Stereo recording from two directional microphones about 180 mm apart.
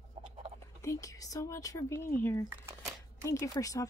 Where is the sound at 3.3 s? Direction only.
20° left (ahead or behind).